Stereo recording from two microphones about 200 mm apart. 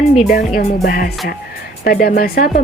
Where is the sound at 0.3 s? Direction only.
45° left (ahead or behind).